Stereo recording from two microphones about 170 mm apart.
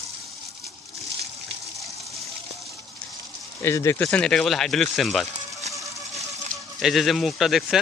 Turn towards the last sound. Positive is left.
turn(degrees=0)  # may be behind; listen again after turning